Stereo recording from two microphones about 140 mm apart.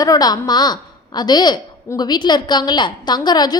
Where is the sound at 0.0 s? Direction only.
25° left (ahead or behind).